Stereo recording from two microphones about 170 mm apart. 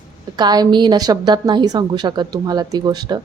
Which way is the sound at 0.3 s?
25° right (ahead or behind).